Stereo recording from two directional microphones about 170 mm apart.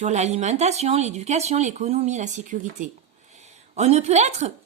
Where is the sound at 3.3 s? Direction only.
40° right (ahead or behind).